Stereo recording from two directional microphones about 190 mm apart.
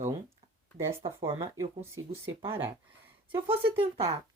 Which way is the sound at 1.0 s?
30° right (ahead or behind).